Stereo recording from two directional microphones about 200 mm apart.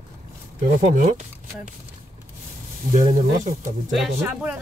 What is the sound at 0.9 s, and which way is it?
Speech, 35° right (ahead or behind).